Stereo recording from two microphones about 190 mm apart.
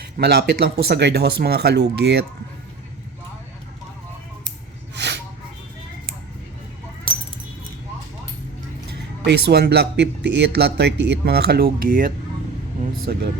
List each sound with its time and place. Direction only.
0.0 s speech: 55° right (ahead or behind)
4.9 s a sound: 65° right (ahead or behind)
9.2 s speech: 60° right (ahead or behind)